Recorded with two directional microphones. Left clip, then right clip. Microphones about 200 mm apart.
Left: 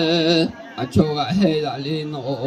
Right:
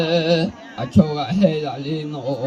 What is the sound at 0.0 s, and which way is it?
Speech, 45° left (ahead or behind).